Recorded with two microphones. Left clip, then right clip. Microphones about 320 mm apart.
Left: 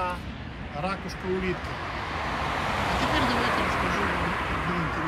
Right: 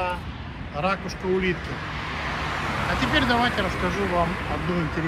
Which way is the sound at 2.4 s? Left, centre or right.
Left.